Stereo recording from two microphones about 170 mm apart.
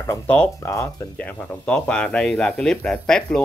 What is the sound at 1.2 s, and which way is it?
Speech, 10° left (ahead or behind).